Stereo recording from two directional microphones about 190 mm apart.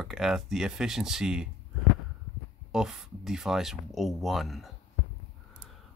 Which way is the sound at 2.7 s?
5° right (ahead or behind).